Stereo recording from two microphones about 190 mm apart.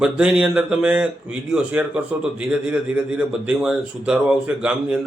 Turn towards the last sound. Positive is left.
turn(degrees=-5)  # may be behind; listen again after turning